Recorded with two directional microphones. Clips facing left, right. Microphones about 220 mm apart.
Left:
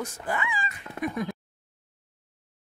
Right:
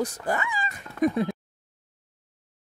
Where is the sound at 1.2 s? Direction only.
30° right (ahead or behind).